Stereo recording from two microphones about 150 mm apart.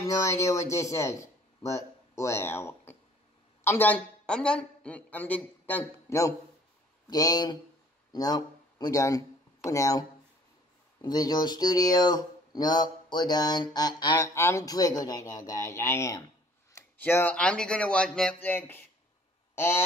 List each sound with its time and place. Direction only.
0.0 s a man's voice: 20° left (ahead or behind)